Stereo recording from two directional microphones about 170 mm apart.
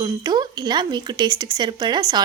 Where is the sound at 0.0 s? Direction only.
25° right (ahead or behind).